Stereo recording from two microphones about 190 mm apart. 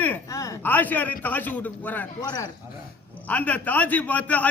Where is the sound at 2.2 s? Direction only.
20° left (ahead or behind).